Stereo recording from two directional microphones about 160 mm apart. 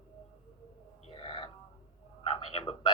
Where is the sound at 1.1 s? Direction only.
30° left (ahead or behind).